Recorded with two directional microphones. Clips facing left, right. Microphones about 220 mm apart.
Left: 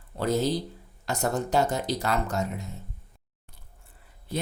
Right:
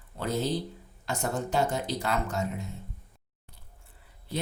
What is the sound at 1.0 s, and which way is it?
Speech, 40° left (ahead or behind).